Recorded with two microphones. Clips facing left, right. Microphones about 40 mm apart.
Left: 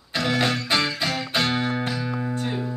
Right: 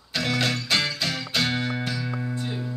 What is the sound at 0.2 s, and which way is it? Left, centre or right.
Music, left.